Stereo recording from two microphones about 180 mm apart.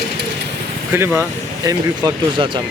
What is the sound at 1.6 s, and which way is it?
Speech, 20° right (ahead or behind).